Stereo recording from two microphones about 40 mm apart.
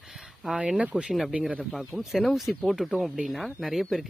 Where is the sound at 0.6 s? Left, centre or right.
Right.